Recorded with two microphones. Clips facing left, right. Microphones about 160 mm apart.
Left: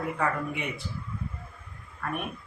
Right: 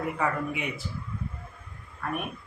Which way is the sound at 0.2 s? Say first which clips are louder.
Even; centre (ahead or behind).